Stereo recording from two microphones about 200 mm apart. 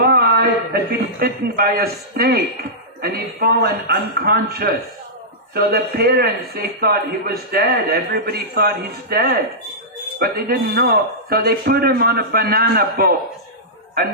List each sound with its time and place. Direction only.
0.0 s a sound: 50° right (ahead or behind)
1.2 s a man's voice: 50° right (ahead or behind)
5.7 s a man's voice: 50° right (ahead or behind)